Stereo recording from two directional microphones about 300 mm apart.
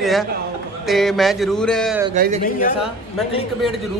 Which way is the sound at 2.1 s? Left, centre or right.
Right.